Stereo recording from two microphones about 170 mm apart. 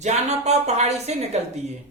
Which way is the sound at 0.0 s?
40° right (ahead or behind).